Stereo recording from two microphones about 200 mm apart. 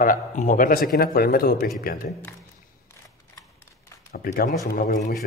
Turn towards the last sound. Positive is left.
turn(degrees=45)  # may be behind; listen again after turning